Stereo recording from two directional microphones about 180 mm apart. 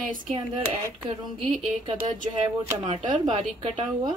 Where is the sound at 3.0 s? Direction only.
25° right (ahead or behind).